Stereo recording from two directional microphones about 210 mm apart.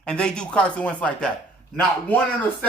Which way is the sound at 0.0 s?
5° left (ahead or behind).